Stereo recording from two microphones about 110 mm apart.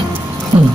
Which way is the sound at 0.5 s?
55° right (ahead or behind).